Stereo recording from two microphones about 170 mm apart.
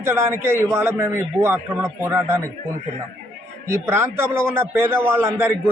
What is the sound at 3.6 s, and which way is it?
A man's voice, 15° right (ahead or behind).